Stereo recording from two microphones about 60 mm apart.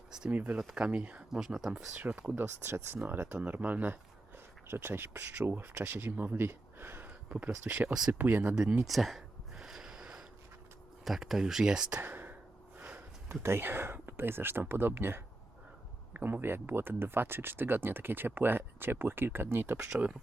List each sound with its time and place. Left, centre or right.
0.3 s speech: right
1.3 s speech: centre
2.0 s speech: right
2.3 s speech: right
4.7 s speech: right
7.3 s speech: right
8.5 s a sound: centre
11.0 s speech: centre
11.9 s a sound: right
13.4 s speech: right